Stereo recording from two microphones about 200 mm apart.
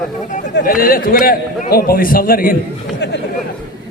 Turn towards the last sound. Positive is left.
turn(degrees=60)  # may be behind; listen again after turning